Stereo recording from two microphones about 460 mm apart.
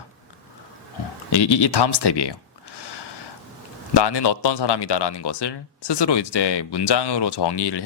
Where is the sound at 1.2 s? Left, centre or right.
Left.